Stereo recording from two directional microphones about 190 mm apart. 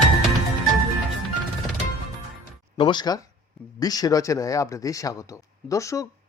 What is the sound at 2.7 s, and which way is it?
Speech, 25° left (ahead or behind).